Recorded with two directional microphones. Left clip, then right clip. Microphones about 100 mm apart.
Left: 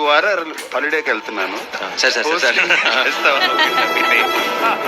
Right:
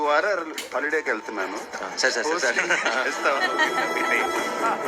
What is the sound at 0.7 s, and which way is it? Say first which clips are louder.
Speech: left 7 dB; 55° left (ahead or behind).